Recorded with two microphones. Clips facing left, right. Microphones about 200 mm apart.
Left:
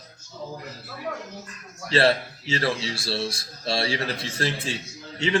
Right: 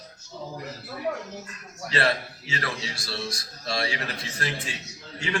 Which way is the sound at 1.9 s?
30° left (ahead or behind).